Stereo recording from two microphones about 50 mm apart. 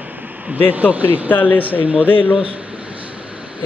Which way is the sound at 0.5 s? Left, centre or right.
Right.